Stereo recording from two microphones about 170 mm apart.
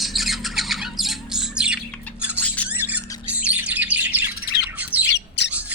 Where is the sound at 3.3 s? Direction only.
10° right (ahead or behind).